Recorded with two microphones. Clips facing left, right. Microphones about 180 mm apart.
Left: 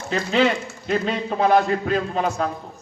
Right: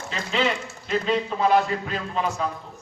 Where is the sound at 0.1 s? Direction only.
45° left (ahead or behind).